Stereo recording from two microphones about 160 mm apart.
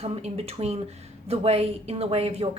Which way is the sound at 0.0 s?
40° right (ahead or behind).